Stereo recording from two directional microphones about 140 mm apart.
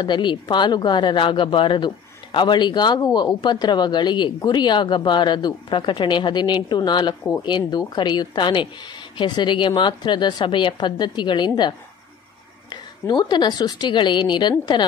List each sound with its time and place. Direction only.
0.0 s speech: 35° left (ahead or behind)
7.2 s a woman's voice: 20° left (ahead or behind)